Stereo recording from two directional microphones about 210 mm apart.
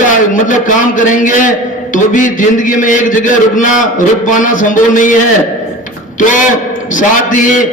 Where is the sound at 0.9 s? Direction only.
35° left (ahead or behind).